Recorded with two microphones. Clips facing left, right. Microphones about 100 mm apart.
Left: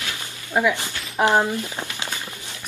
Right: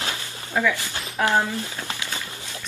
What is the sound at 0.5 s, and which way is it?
Speech, 20° left (ahead or behind).